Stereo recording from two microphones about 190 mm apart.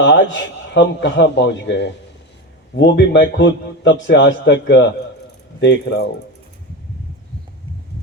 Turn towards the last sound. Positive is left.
turn(degrees=65)  # may be behind; listen again after turning